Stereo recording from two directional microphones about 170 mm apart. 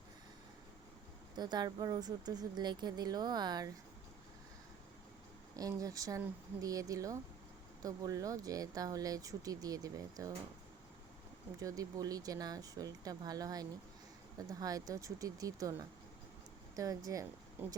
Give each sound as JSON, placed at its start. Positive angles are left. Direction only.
{"t": 1.4, "sound": "speech", "side_deg": -25}
{"t": 5.5, "sound": "speech", "side_deg": -20}
{"t": 11.6, "sound": "speech", "side_deg": -20}